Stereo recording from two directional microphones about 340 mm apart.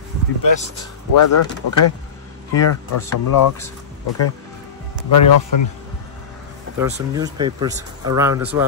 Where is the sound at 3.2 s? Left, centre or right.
Left.